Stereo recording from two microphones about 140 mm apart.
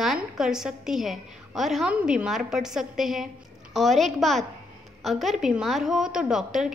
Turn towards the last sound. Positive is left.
turn(degrees=-5)  # may be behind; listen again after turning